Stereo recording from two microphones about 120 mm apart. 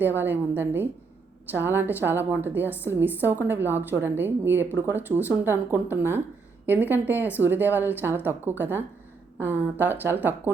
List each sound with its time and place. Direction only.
0.2 s a woman's voice: 15° right (ahead or behind)